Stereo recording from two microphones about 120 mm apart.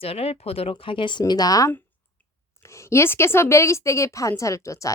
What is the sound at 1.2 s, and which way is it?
Speech, 30° left (ahead or behind).